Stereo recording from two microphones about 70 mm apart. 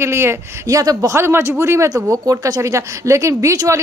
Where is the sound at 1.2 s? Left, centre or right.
Right.